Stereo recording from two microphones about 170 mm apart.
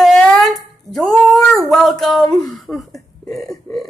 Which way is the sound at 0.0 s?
Centre (ahead or behind).